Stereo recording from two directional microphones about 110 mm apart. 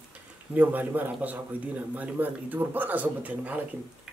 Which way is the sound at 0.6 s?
15° right (ahead or behind).